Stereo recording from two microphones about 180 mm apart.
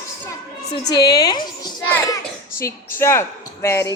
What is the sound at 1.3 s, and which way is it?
Speech, 25° left (ahead or behind).